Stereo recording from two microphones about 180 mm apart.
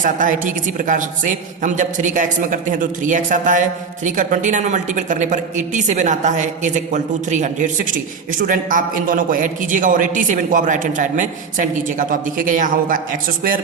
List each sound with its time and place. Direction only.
0.0 s a woman's voice: 45° right (ahead or behind)